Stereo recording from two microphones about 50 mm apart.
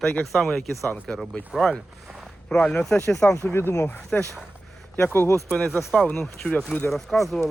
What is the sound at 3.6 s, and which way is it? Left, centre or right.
Speech, left.